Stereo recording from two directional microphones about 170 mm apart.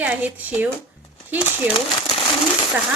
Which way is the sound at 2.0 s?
25° left (ahead or behind).